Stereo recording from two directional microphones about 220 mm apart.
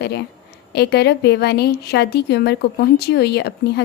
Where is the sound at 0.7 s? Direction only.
50° left (ahead or behind).